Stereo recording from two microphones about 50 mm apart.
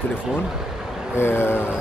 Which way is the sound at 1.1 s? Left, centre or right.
Left.